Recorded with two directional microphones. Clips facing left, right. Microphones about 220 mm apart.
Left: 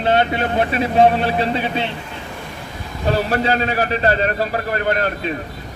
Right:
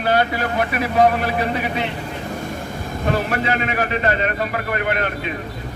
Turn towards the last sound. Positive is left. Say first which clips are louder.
# left 3 dB
turn(degrees=35)  # may be behind; listen again after turning